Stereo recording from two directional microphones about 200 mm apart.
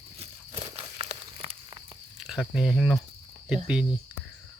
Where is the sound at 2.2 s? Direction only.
Centre (ahead or behind).